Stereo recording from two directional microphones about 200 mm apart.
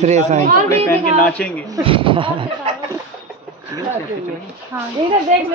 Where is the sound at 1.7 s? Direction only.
25° right (ahead or behind).